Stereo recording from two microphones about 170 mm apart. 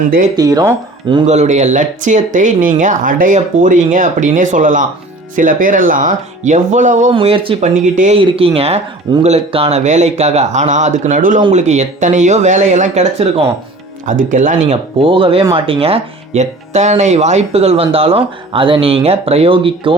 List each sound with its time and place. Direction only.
0.3 s speech: 20° right (ahead or behind)
1.3 s speech: 45° right (ahead or behind)
7.1 s speech: 30° right (ahead or behind)
7.6 s speech: 45° right (ahead or behind)
8.2 s speech: 35° right (ahead or behind)
14.1 s speech: 50° right (ahead or behind)
15.0 s speech: 30° right (ahead or behind)